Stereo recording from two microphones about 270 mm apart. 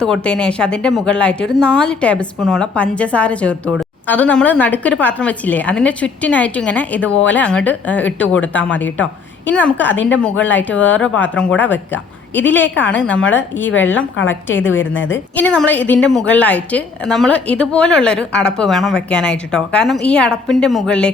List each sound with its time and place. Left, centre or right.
0.0 s a woman's voice: centre
13.6 s a woman's voice: left
15.4 s a woman's voice: centre